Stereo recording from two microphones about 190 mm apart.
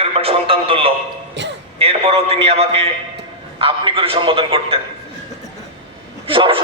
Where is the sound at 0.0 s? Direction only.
30° right (ahead or behind).